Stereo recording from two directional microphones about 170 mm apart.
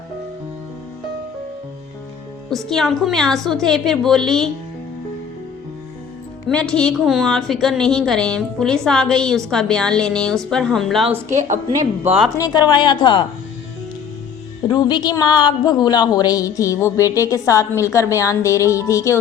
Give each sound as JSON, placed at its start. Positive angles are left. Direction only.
{"t": 2.5, "sound": "a woman's voice", "side_deg": 0}
{"t": 6.5, "sound": "a woman's voice", "side_deg": 5}
{"t": 11.3, "sound": "a woman's voice", "side_deg": -45}
{"t": 12.4, "sound": "speech", "side_deg": 25}
{"t": 14.7, "sound": "speech", "side_deg": 25}